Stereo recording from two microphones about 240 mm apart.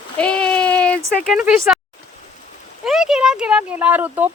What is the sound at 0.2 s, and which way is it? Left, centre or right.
Child singing, centre.